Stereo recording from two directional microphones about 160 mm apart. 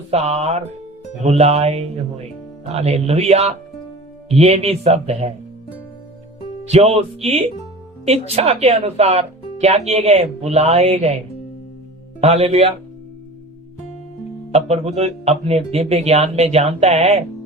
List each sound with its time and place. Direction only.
0.1 s speech: 40° right (ahead or behind)
6.7 s speech: 40° right (ahead or behind)
12.2 s speech: 40° right (ahead or behind)
14.5 s speech: 40° right (ahead or behind)